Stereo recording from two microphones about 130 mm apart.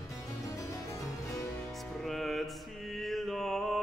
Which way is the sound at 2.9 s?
Centre (ahead or behind).